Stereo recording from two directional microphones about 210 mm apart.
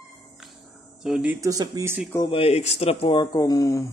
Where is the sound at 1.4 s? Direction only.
20° right (ahead or behind).